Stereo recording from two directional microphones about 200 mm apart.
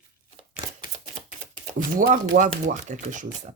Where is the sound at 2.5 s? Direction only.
40° right (ahead or behind).